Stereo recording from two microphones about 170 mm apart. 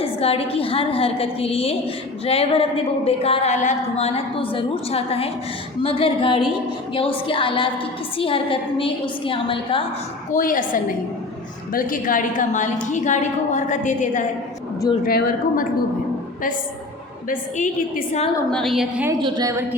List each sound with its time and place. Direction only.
0.0 s a woman's voice: 35° left (ahead or behind)
10.3 s a woman's voice: 50° left (ahead or behind)
15.0 s speech: 60° left (ahead or behind)
17.2 s a woman's voice: 50° left (ahead or behind)
18.5 s a woman's voice: centre (ahead or behind)
19.2 s a woman's voice: 25° right (ahead or behind)